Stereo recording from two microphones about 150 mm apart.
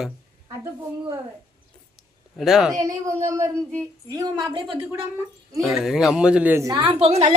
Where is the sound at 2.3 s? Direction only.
Centre (ahead or behind).